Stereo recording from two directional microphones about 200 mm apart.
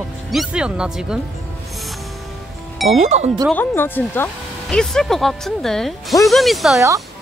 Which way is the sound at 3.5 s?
10° left (ahead or behind).